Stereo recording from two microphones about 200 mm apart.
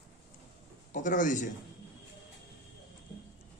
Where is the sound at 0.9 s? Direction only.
40° left (ahead or behind).